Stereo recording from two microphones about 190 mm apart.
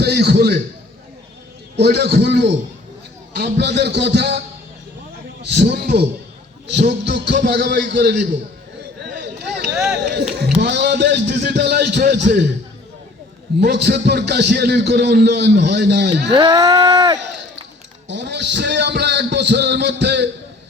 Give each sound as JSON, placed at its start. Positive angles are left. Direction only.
{"t": 0.0, "sound": "a man's voice", "side_deg": -60}
{"t": 1.7, "sound": "a man's voice", "side_deg": -60}
{"t": 5.4, "sound": "a man's voice", "side_deg": -60}
{"t": 9.1, "sound": "a sound", "side_deg": -60}
{"t": 9.7, "sound": "speech", "side_deg": -5}
{"t": 10.6, "sound": "a man's voice", "side_deg": -60}
{"t": 13.6, "sound": "a man's voice", "side_deg": -60}
{"t": 16.3, "sound": "speech", "side_deg": -25}
{"t": 18.1, "sound": "a man's voice", "side_deg": -65}